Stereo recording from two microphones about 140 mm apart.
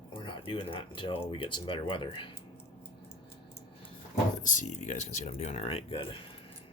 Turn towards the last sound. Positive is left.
turn(degrees=40)  # may be behind; listen again after turning